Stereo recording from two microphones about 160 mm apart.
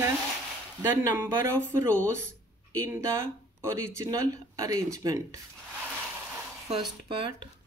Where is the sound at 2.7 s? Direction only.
20° right (ahead or behind).